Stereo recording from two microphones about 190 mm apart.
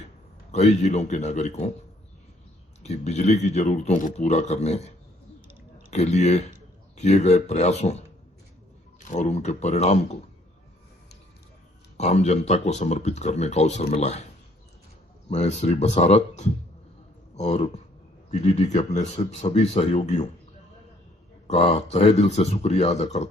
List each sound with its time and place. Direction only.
0.5 s a man's voice: 35° left (ahead or behind)
2.8 s a man's voice: 35° left (ahead or behind)
9.0 s a man's voice: 40° left (ahead or behind)
11.9 s a man's voice: 35° left (ahead or behind)
15.3 s a man's voice: 35° left (ahead or behind)
21.4 s a man's voice: 35° left (ahead or behind)